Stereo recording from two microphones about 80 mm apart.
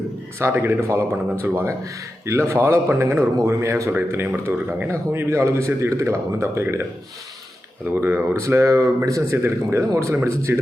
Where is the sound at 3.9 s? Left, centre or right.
Right.